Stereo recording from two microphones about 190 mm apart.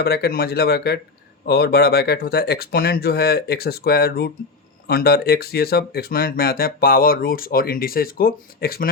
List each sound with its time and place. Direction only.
0.0 s speech: 55° left (ahead or behind)